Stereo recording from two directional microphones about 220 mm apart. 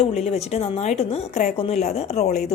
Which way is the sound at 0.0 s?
30° left (ahead or behind).